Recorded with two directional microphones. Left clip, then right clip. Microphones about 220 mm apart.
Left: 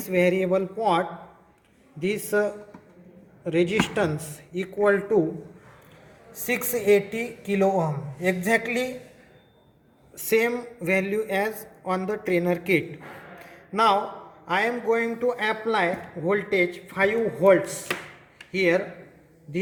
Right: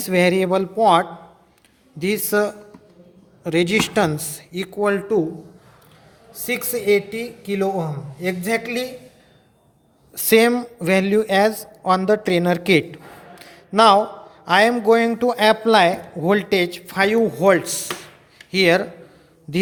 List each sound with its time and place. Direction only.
0.0 s a man's voice: 40° right (ahead or behind)
6.4 s a woman's voice: 20° right (ahead or behind)
10.2 s speech: 45° right (ahead or behind)
13.4 s a sound: 40° right (ahead or behind)
14.4 s a man's voice: 45° right (ahead or behind)